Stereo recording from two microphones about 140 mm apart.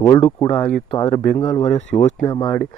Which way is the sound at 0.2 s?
40° left (ahead or behind).